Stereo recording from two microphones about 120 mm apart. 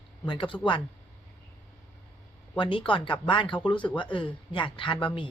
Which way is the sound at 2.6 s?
45° left (ahead or behind).